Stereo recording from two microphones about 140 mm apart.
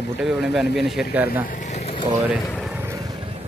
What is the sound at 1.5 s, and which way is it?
Vehicle, 60° left (ahead or behind).